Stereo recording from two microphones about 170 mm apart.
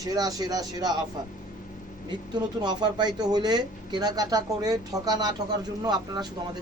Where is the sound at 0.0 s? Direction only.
20° right (ahead or behind).